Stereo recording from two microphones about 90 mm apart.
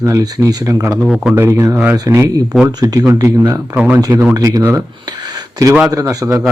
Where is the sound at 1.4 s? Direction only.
30° right (ahead or behind).